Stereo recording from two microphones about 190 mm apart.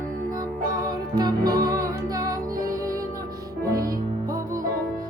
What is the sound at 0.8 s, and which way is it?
Music, 20° right (ahead or behind).